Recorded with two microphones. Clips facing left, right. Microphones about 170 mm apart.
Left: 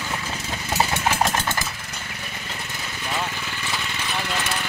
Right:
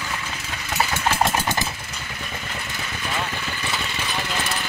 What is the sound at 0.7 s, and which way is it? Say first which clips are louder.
Engine: left 1 dB; 25° left (ahead or behind).